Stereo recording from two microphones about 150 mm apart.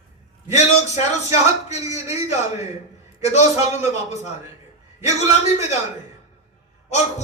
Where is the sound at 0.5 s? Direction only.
50° left (ahead or behind).